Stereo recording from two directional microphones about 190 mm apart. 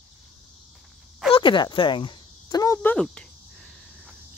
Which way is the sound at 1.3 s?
25° left (ahead or behind).